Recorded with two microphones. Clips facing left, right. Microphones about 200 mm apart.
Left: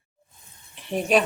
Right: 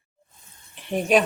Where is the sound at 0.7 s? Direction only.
Centre (ahead or behind).